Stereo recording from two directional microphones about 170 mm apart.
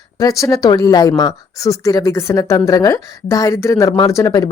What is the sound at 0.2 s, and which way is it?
Speech, 20° left (ahead or behind).